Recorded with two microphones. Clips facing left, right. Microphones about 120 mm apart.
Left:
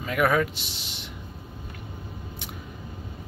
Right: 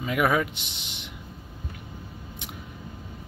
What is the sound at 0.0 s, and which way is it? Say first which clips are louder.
Speech: left 1 dB; 10° right (ahead or behind).